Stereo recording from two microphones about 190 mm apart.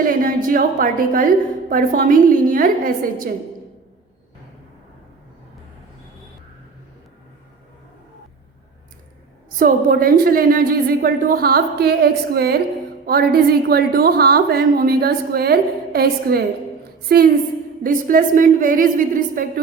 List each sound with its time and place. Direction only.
0.1 s a woman's voice: 50° right (ahead or behind)
9.6 s a woman's voice: 50° right (ahead or behind)